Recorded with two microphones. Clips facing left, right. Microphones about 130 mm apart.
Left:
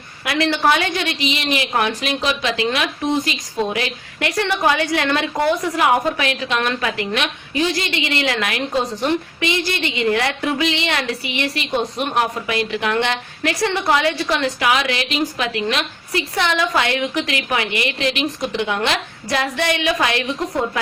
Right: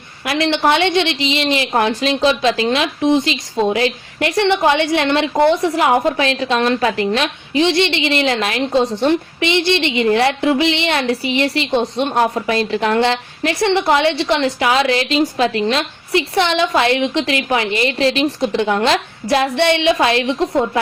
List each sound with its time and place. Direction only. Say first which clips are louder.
0.3 s a woman's voice: right 2 dB; 25° right (ahead or behind)